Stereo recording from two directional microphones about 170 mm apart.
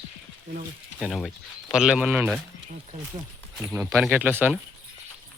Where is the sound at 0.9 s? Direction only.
Centre (ahead or behind).